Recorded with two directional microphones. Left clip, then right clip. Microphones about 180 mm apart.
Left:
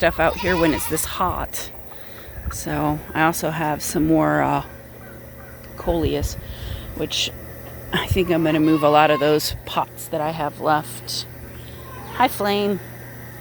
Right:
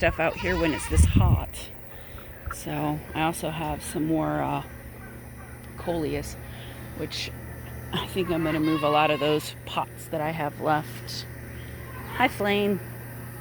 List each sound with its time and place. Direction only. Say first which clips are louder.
0.0 s speech: left 6 dB; 20° left (ahead or behind)
5.8 s speech: left 7 dB; 25° left (ahead or behind)
7.9 s speech: left 7 dB; 35° left (ahead or behind)
8.9 s speech: left 6 dB; 25° left (ahead or behind); by 12.7 s 5° left (ahead or behind)